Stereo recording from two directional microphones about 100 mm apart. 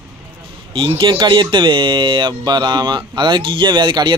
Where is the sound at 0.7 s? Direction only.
60° right (ahead or behind).